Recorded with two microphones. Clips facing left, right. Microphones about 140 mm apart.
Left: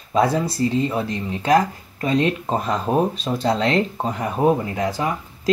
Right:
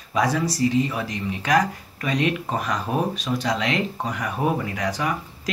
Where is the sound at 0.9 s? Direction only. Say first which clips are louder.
Left 4 dB; 30° left (ahead or behind).